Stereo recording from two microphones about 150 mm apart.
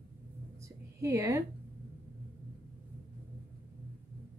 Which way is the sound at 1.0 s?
20° right (ahead or behind).